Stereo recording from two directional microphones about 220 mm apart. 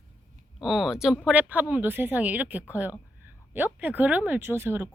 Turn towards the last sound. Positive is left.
turn(degrees=-10)  # may be behind; listen again after turning